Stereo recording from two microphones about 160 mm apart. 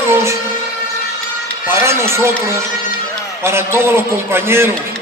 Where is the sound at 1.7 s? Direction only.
15° right (ahead or behind).